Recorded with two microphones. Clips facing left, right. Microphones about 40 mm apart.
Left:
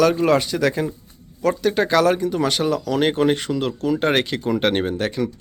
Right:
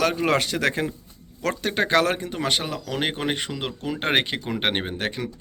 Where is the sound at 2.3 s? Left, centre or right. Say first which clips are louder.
Left 6 dB; right.